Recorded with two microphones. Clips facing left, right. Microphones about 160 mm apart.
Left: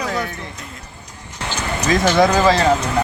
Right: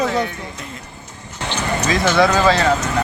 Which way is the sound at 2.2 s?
35° left (ahead or behind).